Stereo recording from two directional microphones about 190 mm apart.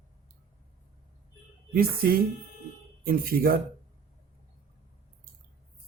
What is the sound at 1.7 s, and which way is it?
Speech, 50° right (ahead or behind).